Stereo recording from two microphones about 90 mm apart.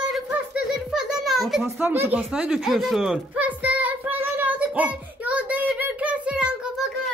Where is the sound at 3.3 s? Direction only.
15° right (ahead or behind).